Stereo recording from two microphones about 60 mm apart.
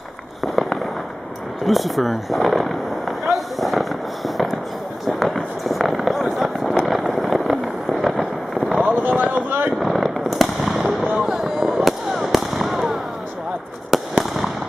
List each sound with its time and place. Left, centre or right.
1.7 s a sound: centre
5.0 s fireworks: centre
8.8 s speech: right
9.8 s fireworks: centre